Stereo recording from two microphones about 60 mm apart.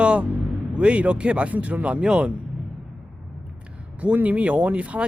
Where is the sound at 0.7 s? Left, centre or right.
Centre.